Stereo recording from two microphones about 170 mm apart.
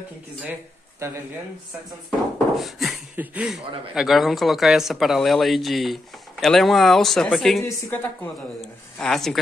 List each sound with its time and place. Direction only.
0.5 s speech: 15° right (ahead or behind)
2.5 s a woman's voice: centre (ahead or behind)
8.5 s speech: 5° left (ahead or behind)